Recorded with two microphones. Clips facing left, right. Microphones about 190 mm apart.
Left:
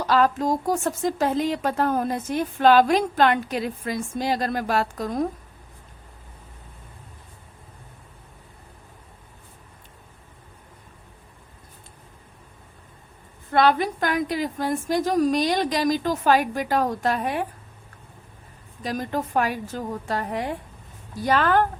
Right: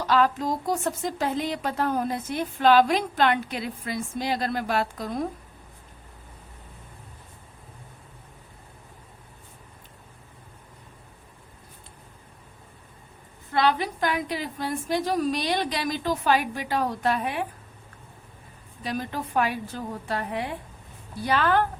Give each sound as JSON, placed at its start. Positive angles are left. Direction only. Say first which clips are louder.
{"t": 0.1, "sound": "speech", "louder": "left 2 dB", "side_deg": 45}
{"t": 13.5, "sound": "speech", "louder": "left 4 dB", "side_deg": 50}
{"t": 18.8, "sound": "speech", "louder": "left 3 dB", "side_deg": 40}